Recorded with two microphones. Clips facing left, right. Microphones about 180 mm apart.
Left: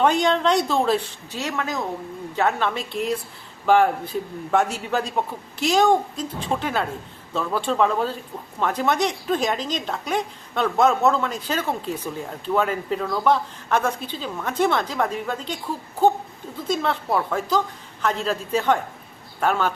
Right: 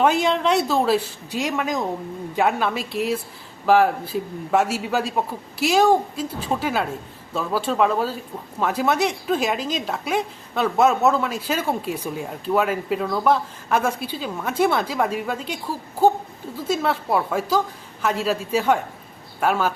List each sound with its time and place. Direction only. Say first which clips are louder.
0.0 s speech: even; 5° right (ahead or behind)